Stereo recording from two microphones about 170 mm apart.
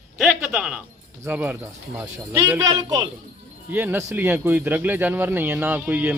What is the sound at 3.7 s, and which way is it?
Speech, 10° right (ahead or behind).